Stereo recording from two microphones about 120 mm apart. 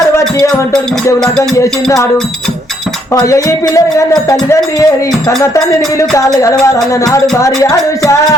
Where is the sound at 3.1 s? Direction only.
25° left (ahead or behind).